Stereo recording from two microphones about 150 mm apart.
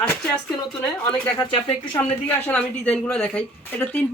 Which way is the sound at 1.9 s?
15° left (ahead or behind).